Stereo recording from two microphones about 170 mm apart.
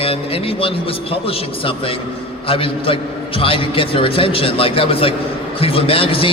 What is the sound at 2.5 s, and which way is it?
A man's voice, 30° left (ahead or behind).